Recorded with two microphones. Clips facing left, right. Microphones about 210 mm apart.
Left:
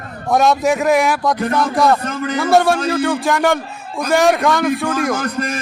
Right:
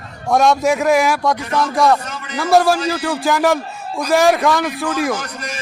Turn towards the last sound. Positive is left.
turn(degrees=55)  # may be behind; listen again after turning